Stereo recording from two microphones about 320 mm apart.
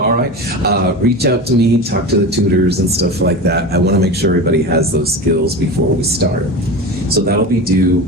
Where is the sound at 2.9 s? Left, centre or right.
Right.